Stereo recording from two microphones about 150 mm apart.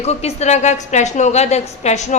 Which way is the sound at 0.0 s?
45° left (ahead or behind).